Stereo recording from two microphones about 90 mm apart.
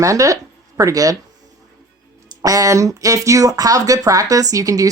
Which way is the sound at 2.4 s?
40° right (ahead or behind).